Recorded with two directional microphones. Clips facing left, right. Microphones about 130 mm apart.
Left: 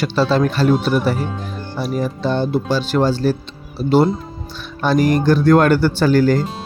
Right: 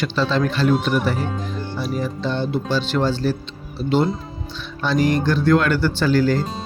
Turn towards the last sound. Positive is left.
turn(degrees=45)  # may be behind; listen again after turning